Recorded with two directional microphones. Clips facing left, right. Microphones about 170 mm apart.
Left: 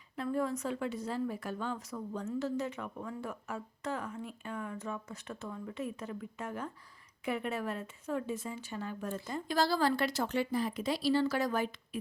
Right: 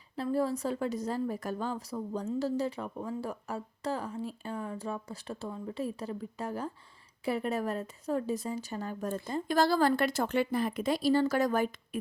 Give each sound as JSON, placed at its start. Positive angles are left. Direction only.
{"t": 0.2, "sound": "a woman's voice", "side_deg": -35}